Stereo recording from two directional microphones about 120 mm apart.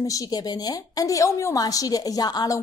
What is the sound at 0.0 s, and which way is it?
A woman's voice, 30° left (ahead or behind).